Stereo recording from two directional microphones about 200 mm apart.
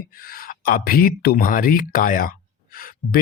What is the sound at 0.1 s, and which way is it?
Speech, 45° left (ahead or behind).